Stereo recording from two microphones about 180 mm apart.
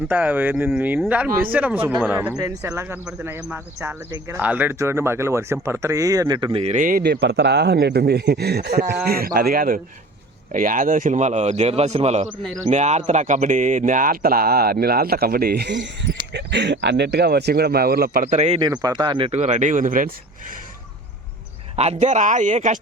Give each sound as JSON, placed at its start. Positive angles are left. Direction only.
{"t": 0.1, "sound": "speech", "side_deg": -10}
{"t": 7.0, "sound": "speech", "side_deg": -70}
{"t": 18.6, "sound": "speech", "side_deg": -20}
{"t": 21.8, "sound": "speech", "side_deg": -40}